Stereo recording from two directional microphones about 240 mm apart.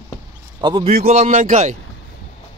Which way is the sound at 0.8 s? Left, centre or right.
Right.